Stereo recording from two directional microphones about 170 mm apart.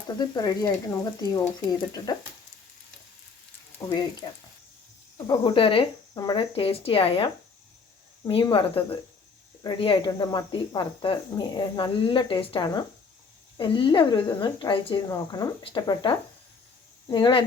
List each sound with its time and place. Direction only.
0.2 s speech: 20° left (ahead or behind)
5.1 s speech: 20° left (ahead or behind)
8.3 s speech: 30° left (ahead or behind)